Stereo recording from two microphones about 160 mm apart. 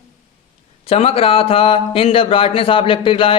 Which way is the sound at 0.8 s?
40° left (ahead or behind).